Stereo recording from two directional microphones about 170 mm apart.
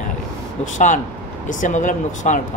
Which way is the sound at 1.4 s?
50° left (ahead or behind).